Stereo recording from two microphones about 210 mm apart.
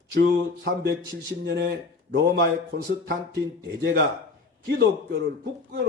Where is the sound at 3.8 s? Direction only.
50° right (ahead or behind).